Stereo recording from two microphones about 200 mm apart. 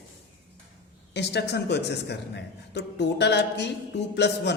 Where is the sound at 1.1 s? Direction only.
60° left (ahead or behind).